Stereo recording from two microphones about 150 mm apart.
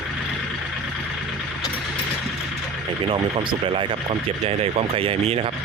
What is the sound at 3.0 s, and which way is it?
Speech, 35° right (ahead or behind).